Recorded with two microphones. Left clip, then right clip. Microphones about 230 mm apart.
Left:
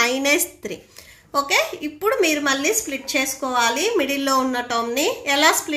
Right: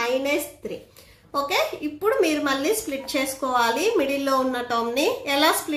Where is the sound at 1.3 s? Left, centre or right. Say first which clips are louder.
Left 3 dB; centre.